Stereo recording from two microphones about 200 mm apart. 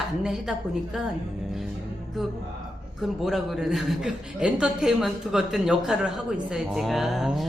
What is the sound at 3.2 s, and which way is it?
A man's voice, centre (ahead or behind).